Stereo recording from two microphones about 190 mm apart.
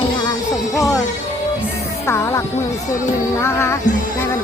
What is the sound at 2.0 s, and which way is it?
Music, 15° left (ahead or behind).